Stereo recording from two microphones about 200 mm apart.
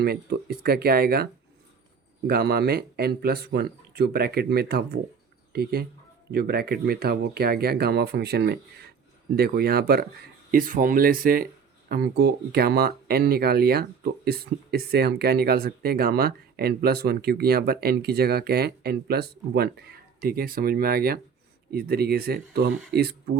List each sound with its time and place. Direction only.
0.0 s speech: 50° right (ahead or behind)
6.3 s speech: 50° right (ahead or behind)